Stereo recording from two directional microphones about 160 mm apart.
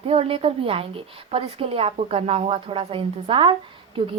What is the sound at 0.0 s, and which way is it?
A woman's voice, 35° right (ahead or behind).